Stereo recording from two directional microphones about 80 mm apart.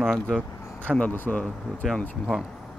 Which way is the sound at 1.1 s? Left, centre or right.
Left.